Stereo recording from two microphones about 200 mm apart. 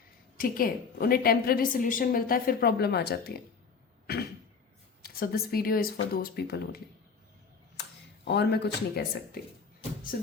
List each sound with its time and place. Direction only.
0.3 s a woman's voice: 45° left (ahead or behind)
4.1 s a sound: 50° left (ahead or behind)
5.0 s a woman's voice: 50° left (ahead or behind)